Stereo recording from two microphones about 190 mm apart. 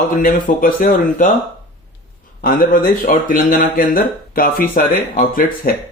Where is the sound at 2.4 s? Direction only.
50° left (ahead or behind).